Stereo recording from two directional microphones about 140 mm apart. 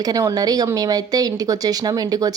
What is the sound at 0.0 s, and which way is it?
Speech, 25° right (ahead or behind).